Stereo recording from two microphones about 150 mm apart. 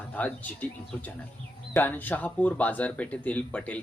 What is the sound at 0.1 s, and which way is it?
Speech, 10° left (ahead or behind).